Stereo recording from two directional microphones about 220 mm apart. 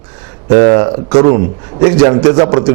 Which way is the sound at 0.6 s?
25° right (ahead or behind).